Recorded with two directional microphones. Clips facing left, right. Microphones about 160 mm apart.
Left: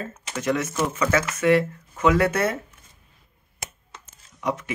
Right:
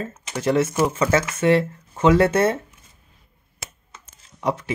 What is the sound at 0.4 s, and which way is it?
Speech, 30° right (ahead or behind).